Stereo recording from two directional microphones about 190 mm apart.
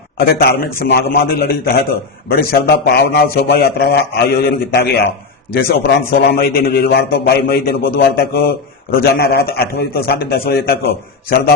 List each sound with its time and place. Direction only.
0.2 s a man's voice: 55° left (ahead or behind)